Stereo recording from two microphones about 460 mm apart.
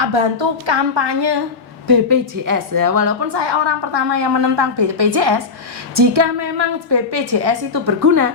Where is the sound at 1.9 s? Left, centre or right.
Right.